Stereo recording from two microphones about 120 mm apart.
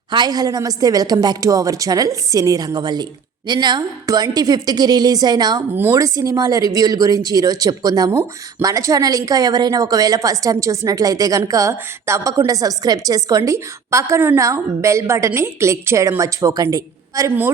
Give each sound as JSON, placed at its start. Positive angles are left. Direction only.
{"t": 0.1, "sound": "a woman's voice", "side_deg": -35}
{"t": 5.7, "sound": "a woman's voice", "side_deg": -20}